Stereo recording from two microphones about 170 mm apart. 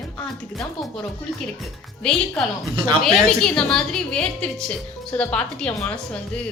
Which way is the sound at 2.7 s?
25° right (ahead or behind).